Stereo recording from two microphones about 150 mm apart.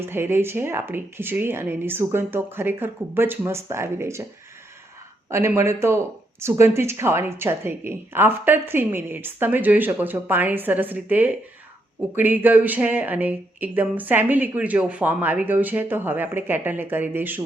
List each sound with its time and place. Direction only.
0.0 s speech: 15° right (ahead or behind)
5.3 s speech: 20° right (ahead or behind)